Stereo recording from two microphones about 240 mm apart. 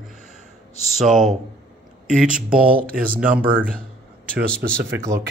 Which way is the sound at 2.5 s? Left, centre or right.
Right.